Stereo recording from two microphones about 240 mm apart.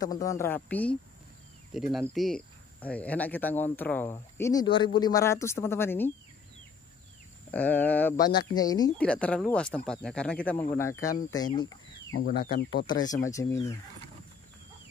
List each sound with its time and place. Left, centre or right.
0.0 s speech: centre
7.5 s speech: centre
9.0 s speech: centre
12.1 s speech: left
13.0 s speech: centre